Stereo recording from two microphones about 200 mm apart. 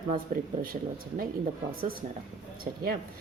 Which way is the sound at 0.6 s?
45° right (ahead or behind).